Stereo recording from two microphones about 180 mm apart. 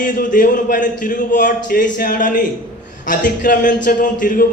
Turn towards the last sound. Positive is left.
turn(degrees=50)  # may be behind; listen again after turning